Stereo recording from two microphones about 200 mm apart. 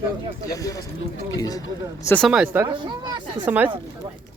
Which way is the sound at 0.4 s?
15° left (ahead or behind).